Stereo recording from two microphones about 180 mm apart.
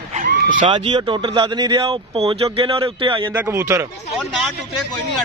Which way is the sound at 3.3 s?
10° right (ahead or behind).